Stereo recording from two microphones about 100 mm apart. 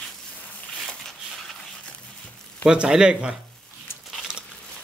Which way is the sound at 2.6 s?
5° right (ahead or behind).